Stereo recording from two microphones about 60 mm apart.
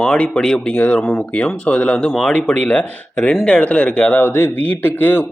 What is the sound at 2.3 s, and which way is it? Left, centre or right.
Speech, centre.